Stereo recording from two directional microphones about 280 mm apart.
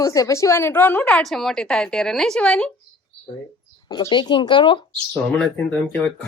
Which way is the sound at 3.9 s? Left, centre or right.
Centre.